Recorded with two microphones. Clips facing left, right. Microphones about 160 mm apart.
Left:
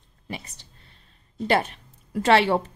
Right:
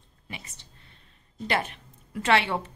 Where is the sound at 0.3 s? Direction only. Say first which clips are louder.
Left 7 dB; 35° left (ahead or behind).